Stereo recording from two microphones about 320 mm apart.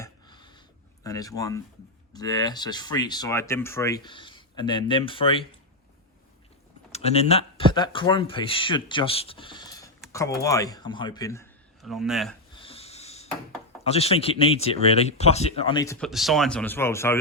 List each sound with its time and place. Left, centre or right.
0.0 s a sound: centre
1.0 s speech: centre
6.9 s speech: centre
12.5 s wheeze: centre
13.8 s speech: centre